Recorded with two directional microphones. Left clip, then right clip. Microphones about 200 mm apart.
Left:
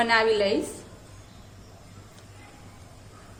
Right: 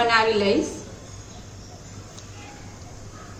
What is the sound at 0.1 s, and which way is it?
Speech, 45° left (ahead or behind).